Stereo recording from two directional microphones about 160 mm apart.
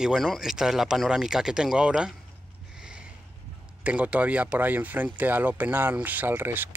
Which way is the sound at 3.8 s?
10° right (ahead or behind).